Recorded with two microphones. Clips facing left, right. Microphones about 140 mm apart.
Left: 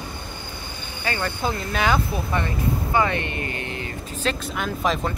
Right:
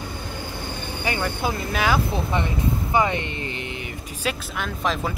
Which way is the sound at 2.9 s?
20° right (ahead or behind).